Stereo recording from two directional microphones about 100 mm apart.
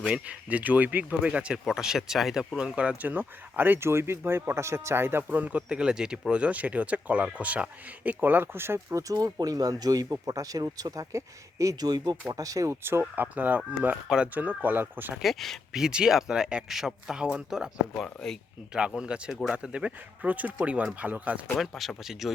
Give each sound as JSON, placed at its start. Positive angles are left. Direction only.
{"t": 0.3, "sound": "speech", "side_deg": -15}
{"t": 15.1, "sound": "speech", "side_deg": 0}
{"t": 17.9, "sound": "speech", "side_deg": 5}
{"t": 18.9, "sound": "speech", "side_deg": -10}
{"t": 21.6, "sound": "speech", "side_deg": 0}